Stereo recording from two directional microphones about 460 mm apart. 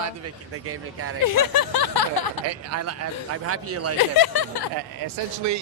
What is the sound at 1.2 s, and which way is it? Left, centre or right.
Speech, left.